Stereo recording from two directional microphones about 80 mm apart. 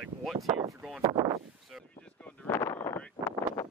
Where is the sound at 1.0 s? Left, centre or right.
Right.